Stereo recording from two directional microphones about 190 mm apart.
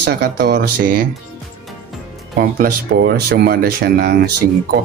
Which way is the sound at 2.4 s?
50° right (ahead or behind).